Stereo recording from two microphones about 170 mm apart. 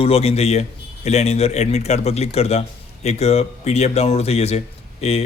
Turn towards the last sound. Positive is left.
turn(degrees=35)  # may be behind; listen again after turning